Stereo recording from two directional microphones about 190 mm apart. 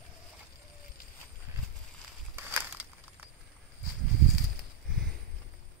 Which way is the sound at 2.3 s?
10° right (ahead or behind).